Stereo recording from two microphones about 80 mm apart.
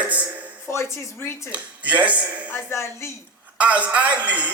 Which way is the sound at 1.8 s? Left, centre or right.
Centre.